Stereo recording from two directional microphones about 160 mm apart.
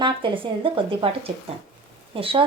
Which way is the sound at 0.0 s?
30° right (ahead or behind).